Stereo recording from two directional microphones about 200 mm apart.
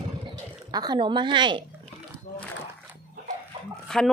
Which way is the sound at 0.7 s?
20° right (ahead or behind).